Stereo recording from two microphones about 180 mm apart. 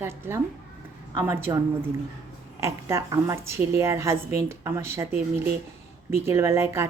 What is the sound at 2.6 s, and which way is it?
A woman's voice, 15° right (ahead or behind).